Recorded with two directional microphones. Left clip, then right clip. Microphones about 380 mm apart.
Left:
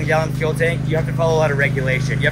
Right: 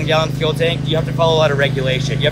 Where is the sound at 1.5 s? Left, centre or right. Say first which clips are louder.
Right 2 dB; right.